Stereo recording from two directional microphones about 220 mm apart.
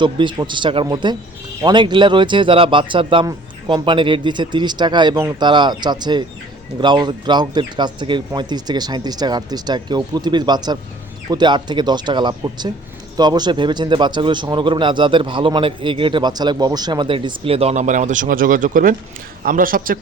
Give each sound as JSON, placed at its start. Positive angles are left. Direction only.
{"t": 0.0, "sound": "a man's voice", "side_deg": -20}